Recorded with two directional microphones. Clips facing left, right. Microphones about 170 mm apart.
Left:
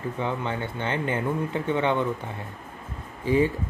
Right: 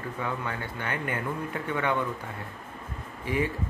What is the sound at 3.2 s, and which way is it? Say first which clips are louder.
Speech: left 7 dB; 30° left (ahead or behind).